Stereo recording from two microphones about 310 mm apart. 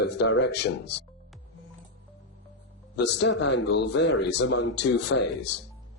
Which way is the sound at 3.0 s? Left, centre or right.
Left.